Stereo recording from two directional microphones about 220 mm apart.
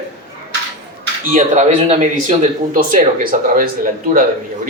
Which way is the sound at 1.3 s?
35° right (ahead or behind).